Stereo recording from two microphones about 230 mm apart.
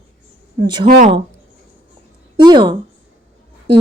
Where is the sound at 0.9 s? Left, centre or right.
Right.